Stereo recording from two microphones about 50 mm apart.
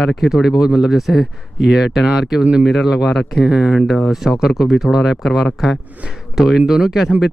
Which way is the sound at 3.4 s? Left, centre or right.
Centre.